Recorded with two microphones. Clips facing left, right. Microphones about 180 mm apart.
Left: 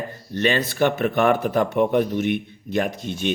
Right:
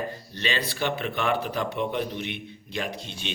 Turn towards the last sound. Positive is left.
turn(degrees=50)  # may be behind; listen again after turning